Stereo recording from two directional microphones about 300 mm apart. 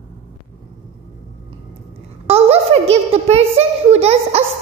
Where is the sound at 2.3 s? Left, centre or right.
Right.